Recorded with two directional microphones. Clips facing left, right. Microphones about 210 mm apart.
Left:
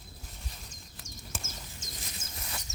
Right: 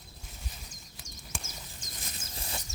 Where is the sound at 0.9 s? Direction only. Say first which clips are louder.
Left 1 dB; 5° left (ahead or behind).